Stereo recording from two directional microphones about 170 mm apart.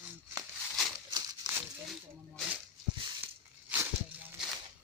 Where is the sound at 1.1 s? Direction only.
25° right (ahead or behind).